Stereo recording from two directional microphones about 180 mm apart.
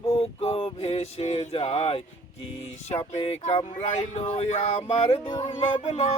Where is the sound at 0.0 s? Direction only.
30° left (ahead or behind).